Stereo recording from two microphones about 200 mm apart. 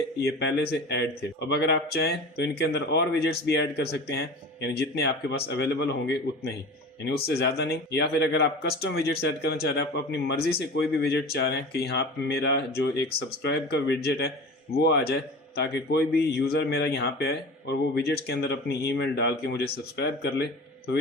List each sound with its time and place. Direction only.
0.2 s speech: 55° left (ahead or behind)
7.0 s speech: 55° left (ahead or behind)